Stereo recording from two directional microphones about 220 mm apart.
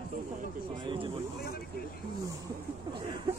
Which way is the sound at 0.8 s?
20° right (ahead or behind).